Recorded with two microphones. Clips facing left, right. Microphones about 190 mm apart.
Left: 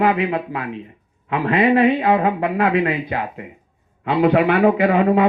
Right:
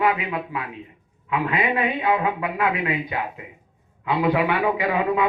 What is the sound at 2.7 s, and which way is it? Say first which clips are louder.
Speech: left 6 dB; 65° left (ahead or behind).